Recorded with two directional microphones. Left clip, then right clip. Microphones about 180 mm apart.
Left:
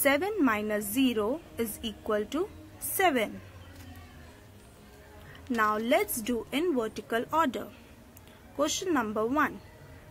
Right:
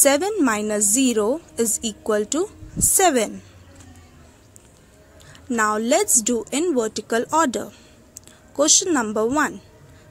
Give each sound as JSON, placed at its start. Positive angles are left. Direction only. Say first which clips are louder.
{"t": 0.0, "sound": "a woman's voice", "louder": "right 8 dB", "side_deg": -40}
{"t": 5.3, "sound": "a woman's voice", "louder": "right 7 dB", "side_deg": -35}